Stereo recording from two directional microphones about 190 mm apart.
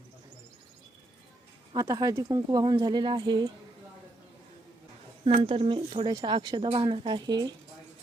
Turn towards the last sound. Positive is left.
turn(degrees=-20)  # may be behind; listen again after turning